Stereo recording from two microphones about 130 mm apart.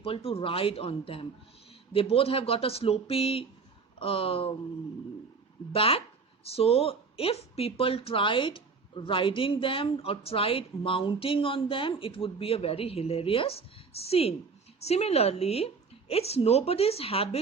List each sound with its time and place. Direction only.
0.0 s speech: 50° left (ahead or behind)
5.7 s speech: 45° left (ahead or behind)